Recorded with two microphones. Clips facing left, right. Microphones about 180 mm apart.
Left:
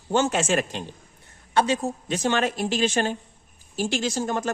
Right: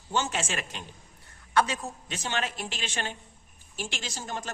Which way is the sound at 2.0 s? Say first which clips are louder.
Left 9 dB; 45° left (ahead or behind).